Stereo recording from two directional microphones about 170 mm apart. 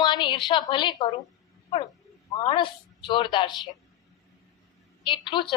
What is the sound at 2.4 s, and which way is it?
A woman's voice, 30° left (ahead or behind).